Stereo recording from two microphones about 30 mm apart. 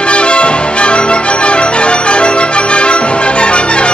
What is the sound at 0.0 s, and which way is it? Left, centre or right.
Music, left.